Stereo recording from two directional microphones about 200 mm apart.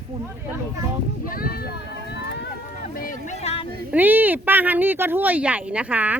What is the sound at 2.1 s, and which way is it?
Run, 55° left (ahead or behind).